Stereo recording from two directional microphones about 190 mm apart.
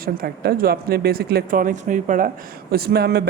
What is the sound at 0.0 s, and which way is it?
Speech, 50° right (ahead or behind).